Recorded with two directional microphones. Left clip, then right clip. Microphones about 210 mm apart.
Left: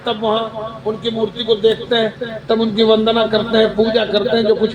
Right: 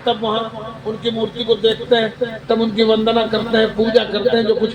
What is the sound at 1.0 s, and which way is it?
A man's voice, 25° left (ahead or behind).